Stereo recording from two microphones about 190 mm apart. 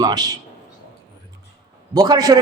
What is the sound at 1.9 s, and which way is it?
Speech, 20° right (ahead or behind).